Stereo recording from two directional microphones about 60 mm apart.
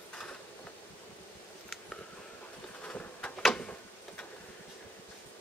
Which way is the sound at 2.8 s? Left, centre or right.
Left.